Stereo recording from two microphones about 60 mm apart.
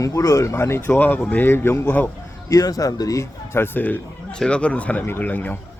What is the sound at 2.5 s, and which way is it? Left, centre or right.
Speech, left.